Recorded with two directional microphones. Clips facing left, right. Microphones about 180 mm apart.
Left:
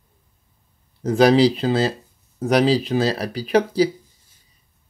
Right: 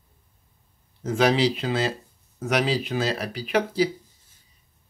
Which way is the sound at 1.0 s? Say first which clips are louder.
Left 7 dB; 35° left (ahead or behind).